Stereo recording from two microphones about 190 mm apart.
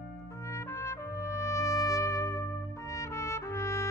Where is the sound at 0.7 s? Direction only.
15° left (ahead or behind).